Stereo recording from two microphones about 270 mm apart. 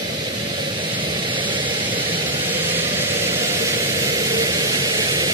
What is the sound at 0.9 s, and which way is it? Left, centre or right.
Vehicle, centre.